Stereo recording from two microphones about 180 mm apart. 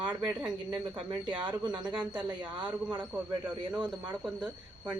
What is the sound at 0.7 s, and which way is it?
Speech, 25° right (ahead or behind).